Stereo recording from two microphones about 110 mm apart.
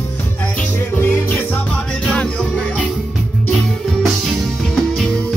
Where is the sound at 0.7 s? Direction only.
20° left (ahead or behind).